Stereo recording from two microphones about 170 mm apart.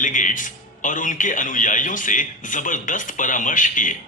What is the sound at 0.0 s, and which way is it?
A man's voice, 50° left (ahead or behind).